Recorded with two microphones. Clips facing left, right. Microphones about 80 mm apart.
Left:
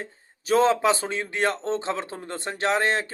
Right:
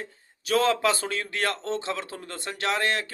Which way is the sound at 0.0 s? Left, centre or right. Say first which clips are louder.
Left 2 dB; left.